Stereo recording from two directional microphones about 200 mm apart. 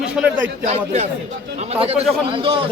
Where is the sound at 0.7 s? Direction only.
30° right (ahead or behind).